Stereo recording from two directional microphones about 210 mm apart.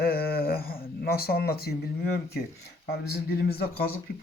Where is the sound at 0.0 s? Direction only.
45° left (ahead or behind).